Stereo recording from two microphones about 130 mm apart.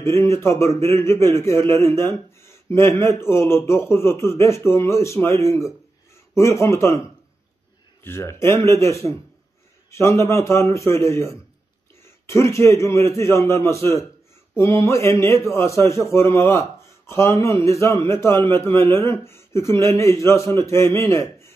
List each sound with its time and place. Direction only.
0.0 s a man's voice: 20° left (ahead or behind)
8.0 s a man's voice: 20° left (ahead or behind)